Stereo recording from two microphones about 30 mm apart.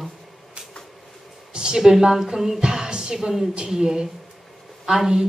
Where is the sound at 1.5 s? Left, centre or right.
Right.